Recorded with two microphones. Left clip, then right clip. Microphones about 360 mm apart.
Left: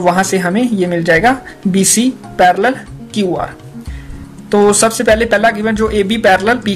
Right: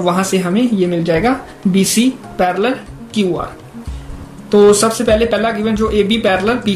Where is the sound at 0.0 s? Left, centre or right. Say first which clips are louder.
Left 3 dB; left.